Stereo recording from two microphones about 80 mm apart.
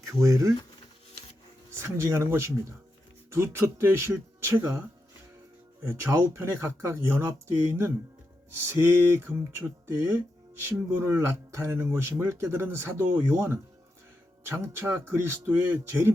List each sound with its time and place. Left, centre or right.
0.0 s speech: right
1.7 s speech: right
5.8 s speech: right
8.5 s a sound: right
9.4 s speech: right